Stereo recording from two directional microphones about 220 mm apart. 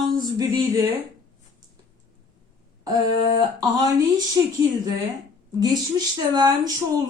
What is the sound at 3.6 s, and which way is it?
Speech, 15° right (ahead or behind).